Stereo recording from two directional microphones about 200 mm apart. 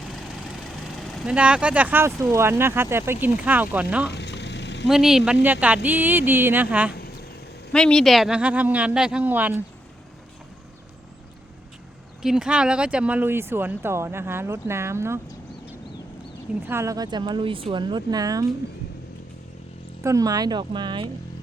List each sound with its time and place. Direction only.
0.7 s speech: centre (ahead or behind)
4.1 s a sound: 60° left (ahead or behind)
4.9 s speech: centre (ahead or behind)
6.9 s a sound: 50° left (ahead or behind)
7.7 s speech: 5° left (ahead or behind)
12.2 s speech: 5° right (ahead or behind)
16.6 s speech: 15° right (ahead or behind)
20.0 s speech: 15° right (ahead or behind)